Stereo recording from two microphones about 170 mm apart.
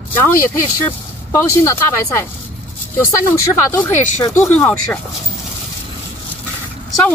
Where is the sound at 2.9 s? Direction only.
15° left (ahead or behind).